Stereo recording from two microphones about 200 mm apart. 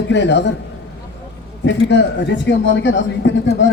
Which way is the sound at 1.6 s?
65° left (ahead or behind).